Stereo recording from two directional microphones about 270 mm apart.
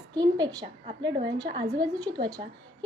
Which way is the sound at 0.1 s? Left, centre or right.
Centre.